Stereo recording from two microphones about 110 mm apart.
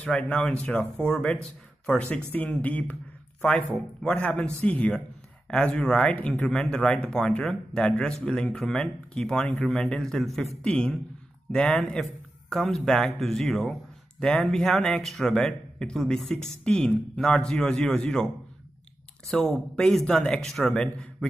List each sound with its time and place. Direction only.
0.3 s speech: 10° left (ahead or behind)